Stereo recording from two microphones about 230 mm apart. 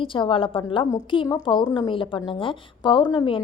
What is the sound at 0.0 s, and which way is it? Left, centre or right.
A woman's voice, left.